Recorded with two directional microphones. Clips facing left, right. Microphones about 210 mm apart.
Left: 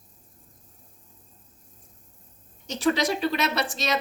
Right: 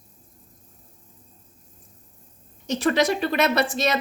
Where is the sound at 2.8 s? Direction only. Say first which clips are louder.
Right 2 dB; 55° right (ahead or behind).